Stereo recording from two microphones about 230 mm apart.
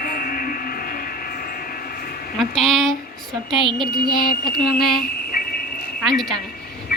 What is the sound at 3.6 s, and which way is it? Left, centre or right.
Mantra, right.